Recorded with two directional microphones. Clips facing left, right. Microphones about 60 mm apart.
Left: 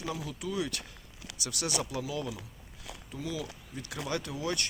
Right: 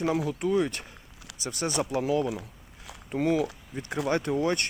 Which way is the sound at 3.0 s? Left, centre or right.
Right.